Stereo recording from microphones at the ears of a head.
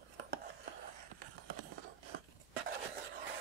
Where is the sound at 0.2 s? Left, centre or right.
Right.